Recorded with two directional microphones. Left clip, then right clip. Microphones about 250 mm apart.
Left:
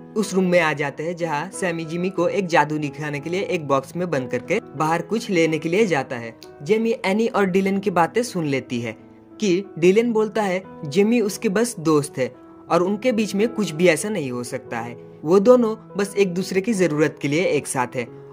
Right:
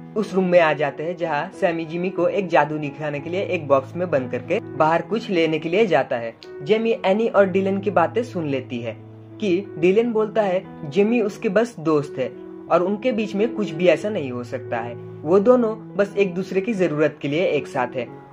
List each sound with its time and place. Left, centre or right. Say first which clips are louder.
0.2 s a woman's voice: right 2 dB; left
9.9 s a woman's voice: even; left
16.5 s a woman's voice: left 1 dB; left